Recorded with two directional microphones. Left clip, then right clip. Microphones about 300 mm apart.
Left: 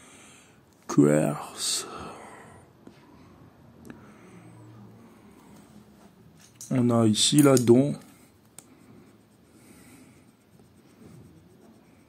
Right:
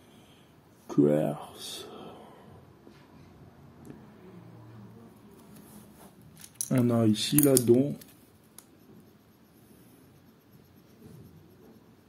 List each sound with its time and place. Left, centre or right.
0.8 s speech: left
1.5 s a sound: left
3.9 s vehicle: left
6.7 s speech: centre
7.0 s speech: centre